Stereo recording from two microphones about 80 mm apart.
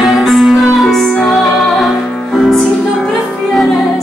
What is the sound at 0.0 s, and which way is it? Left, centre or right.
Music, centre.